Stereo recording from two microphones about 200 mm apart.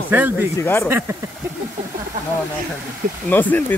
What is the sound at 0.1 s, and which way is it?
Speech, 10° right (ahead or behind).